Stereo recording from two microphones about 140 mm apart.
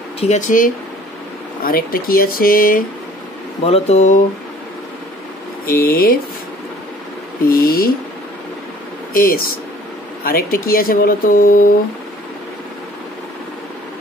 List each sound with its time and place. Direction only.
0.2 s speech: 60° left (ahead or behind)
1.6 s speech: 90° left
3.6 s speech: 50° left (ahead or behind)
5.7 s speech: 90° left
7.4 s a sound: 90° left
9.1 s speech: 90° left